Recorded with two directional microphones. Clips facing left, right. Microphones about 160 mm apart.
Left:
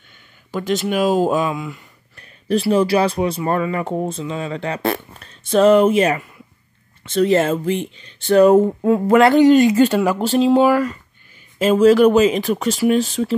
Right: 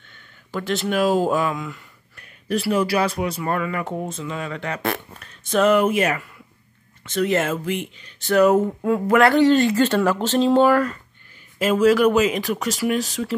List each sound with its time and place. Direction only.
0.1 s speech: 15° left (ahead or behind)
2.1 s speech: 30° left (ahead or behind); by 11.0 s 10° left (ahead or behind)
11.5 s speech: 30° left (ahead or behind)